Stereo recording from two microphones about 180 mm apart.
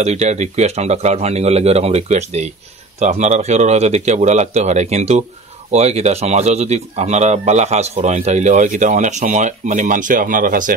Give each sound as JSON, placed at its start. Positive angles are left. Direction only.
{"t": 0.0, "sound": "speech", "side_deg": -40}